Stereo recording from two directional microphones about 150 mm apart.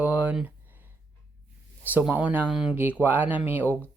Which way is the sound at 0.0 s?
10° right (ahead or behind).